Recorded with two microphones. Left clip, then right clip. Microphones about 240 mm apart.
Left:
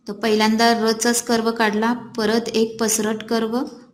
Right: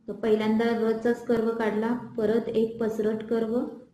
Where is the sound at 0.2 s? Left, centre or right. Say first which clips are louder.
Left 7 dB; left.